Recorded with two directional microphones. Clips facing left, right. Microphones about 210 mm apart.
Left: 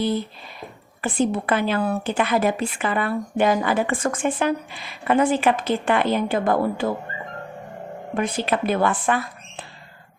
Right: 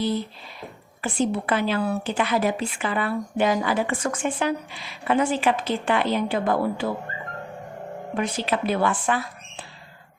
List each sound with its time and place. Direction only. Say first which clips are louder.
1.0 s a woman's voice: left 2 dB; 55° left (ahead or behind)
8.1 s a woman's voice: left 2 dB; 50° left (ahead or behind)